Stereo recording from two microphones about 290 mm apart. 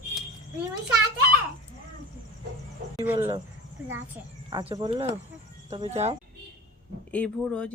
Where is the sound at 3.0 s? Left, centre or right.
Centre.